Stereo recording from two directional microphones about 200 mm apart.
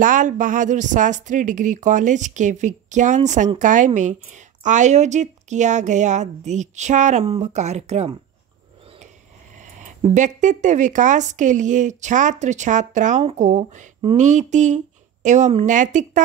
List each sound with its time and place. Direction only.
0.0 s speech: 40° right (ahead or behind)
9.6 s speech: 35° right (ahead or behind)